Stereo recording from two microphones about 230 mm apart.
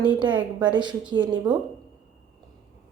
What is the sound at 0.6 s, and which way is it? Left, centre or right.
Speech, centre.